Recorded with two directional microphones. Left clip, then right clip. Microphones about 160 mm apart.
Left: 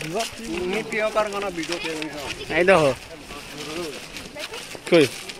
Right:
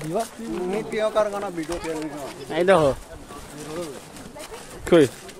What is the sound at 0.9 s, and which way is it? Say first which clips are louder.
Speech: right 1 dB; 75° right (ahead or behind).